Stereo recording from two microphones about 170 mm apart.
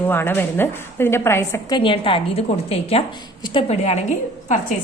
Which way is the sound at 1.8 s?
30° left (ahead or behind).